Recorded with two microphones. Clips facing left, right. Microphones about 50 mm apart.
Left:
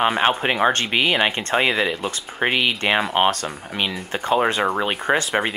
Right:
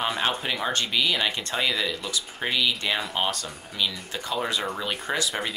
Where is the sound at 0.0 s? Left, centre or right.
Left.